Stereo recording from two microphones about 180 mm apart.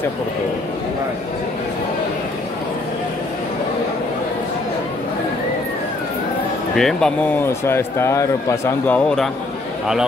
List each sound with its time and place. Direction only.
6.8 s speech: centre (ahead or behind)